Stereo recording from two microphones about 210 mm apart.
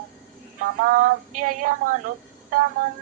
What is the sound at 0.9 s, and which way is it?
Female singing, 40° right (ahead or behind).